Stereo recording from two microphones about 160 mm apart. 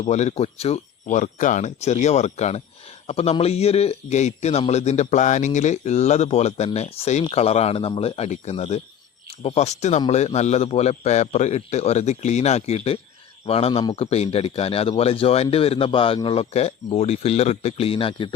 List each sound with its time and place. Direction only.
0.0 s a man's voice: 45° left (ahead or behind)